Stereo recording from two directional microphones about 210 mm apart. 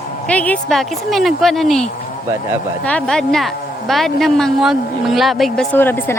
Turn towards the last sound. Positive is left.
turn(degrees=10)  # may be behind; listen again after turning